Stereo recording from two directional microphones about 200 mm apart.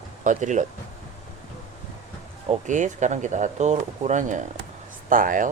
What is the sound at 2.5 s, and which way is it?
Speech, 40° right (ahead or behind).